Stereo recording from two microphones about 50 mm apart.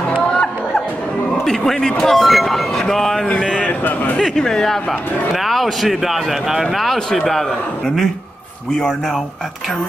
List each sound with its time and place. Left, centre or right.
0.3 s music: centre
1.4 s speech: centre
3.3 s a man's voice: left
3.8 s speech: left
4.2 s speech: centre